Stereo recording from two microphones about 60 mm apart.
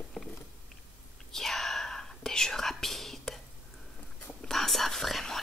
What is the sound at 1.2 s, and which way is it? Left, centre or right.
Whispering, centre.